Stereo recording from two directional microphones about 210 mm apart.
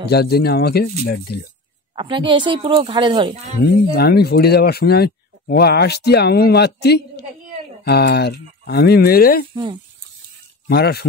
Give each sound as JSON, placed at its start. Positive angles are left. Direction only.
{"t": 0.1, "sound": "speech", "side_deg": 50}
{"t": 2.0, "sound": "speech", "side_deg": -25}
{"t": 3.9, "sound": "speech", "side_deg": 50}
{"t": 10.7, "sound": "speech", "side_deg": 50}